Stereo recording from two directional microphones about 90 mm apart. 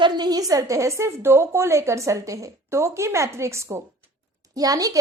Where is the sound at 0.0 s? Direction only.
50° right (ahead or behind).